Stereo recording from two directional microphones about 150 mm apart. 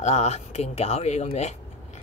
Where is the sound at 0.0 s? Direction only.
50° left (ahead or behind).